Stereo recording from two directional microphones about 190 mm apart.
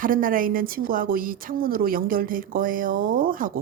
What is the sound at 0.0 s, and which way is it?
Speech, 45° right (ahead or behind).